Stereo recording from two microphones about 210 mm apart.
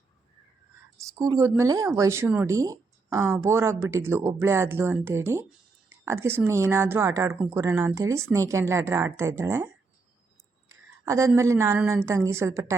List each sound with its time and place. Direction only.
0.9 s speech: 15° right (ahead or behind)
11.0 s speech: 15° right (ahead or behind)